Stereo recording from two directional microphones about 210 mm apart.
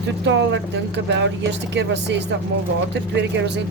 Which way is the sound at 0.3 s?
55° right (ahead or behind).